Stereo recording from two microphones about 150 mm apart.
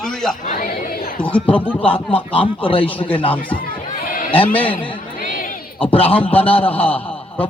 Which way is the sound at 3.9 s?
65° left (ahead or behind).